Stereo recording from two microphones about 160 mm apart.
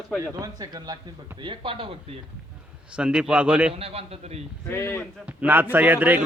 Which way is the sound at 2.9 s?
5° right (ahead or behind).